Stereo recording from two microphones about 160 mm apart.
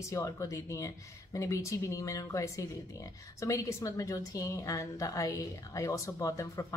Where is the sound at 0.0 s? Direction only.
20° left (ahead or behind).